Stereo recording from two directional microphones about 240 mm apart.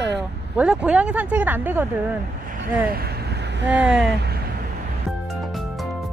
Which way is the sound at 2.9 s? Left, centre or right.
Right.